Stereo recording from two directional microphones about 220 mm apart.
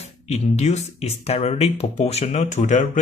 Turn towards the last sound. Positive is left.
turn(degrees=35)  # may be behind; listen again after turning